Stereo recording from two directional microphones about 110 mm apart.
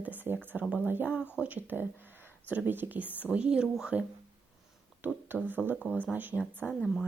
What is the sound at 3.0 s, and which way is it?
Speech, 15° left (ahead or behind).